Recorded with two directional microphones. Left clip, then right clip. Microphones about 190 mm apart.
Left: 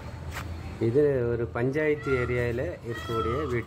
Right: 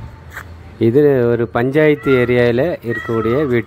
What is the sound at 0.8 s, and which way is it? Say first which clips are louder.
Speech: right 12 dB; 35° right (ahead or behind).